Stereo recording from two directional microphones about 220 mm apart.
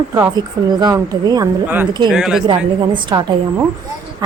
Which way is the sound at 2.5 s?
20° right (ahead or behind).